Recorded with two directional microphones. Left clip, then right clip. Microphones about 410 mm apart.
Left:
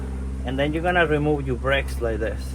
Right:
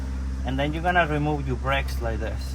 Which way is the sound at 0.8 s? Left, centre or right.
Centre.